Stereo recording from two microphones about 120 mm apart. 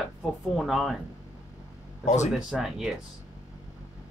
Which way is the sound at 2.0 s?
75° left (ahead or behind).